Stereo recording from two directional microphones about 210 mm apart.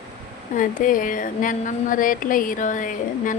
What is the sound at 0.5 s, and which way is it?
A woman's voice, 40° left (ahead or behind).